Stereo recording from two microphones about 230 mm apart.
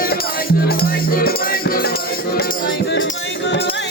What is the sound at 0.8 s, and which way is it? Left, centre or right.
Music, left.